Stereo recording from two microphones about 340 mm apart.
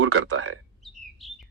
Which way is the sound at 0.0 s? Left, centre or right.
Right.